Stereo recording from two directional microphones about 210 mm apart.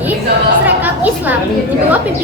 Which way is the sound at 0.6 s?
10° right (ahead or behind).